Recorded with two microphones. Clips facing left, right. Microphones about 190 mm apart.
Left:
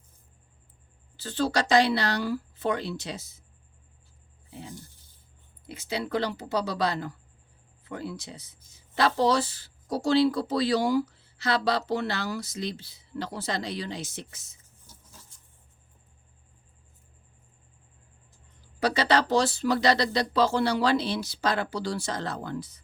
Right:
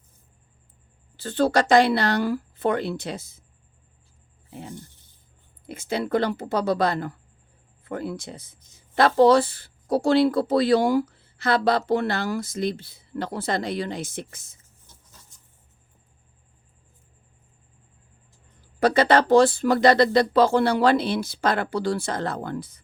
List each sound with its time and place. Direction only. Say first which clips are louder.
1.1 s speech: right 6 dB; 55° right (ahead or behind)
5.6 s speech: right 5 dB; 50° right (ahead or behind)
18.8 s speech: right 6 dB; 50° right (ahead or behind)